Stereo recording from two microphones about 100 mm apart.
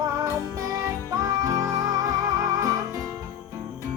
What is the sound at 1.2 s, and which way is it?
Music, 35° right (ahead or behind).